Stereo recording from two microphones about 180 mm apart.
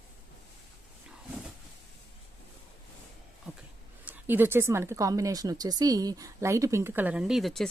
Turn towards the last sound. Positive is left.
turn(degrees=0)  # may be behind; listen again after turning